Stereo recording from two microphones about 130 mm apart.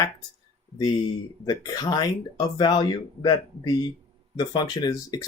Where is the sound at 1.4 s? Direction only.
30° left (ahead or behind).